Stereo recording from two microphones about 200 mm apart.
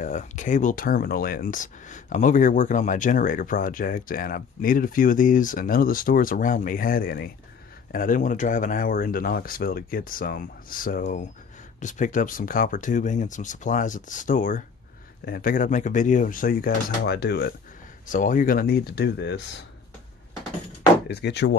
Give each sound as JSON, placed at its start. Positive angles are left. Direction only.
{"t": 0.0, "sound": "speech", "side_deg": 40}
{"t": 18.0, "sound": "speech", "side_deg": 40}
{"t": 21.1, "sound": "speech", "side_deg": 55}